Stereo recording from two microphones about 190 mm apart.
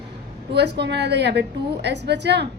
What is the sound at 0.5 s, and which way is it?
A woman's voice, 60° right (ahead or behind).